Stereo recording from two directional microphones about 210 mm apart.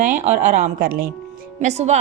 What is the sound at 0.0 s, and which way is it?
Speech, 35° right (ahead or behind).